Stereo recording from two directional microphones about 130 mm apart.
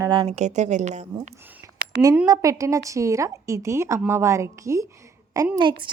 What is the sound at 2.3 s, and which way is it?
A woman's voice, 25° right (ahead or behind).